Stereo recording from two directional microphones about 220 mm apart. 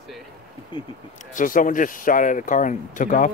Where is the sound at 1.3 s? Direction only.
35° left (ahead or behind).